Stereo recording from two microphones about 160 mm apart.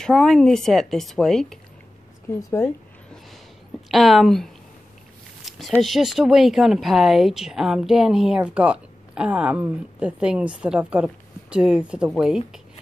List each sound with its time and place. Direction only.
0.0 s speech: 5° left (ahead or behind)
2.5 s a sound: 15° left (ahead or behind)
3.9 s speech: centre (ahead or behind)
5.8 s speech: centre (ahead or behind)